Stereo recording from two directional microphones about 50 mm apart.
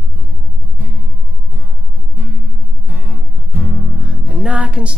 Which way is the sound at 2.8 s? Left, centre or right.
Right.